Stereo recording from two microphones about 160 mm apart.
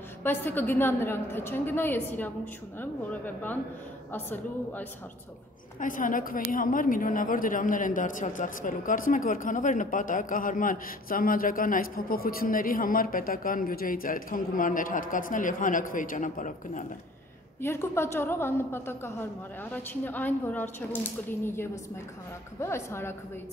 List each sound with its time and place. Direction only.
0.2 s a woman's voice: 15° left (ahead or behind)
5.8 s a woman's voice: 55° left (ahead or behind)
17.6 s a woman's voice: 15° left (ahead or behind)